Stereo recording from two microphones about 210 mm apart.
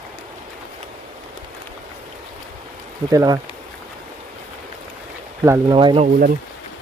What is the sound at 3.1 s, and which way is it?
Speech, 15° right (ahead or behind).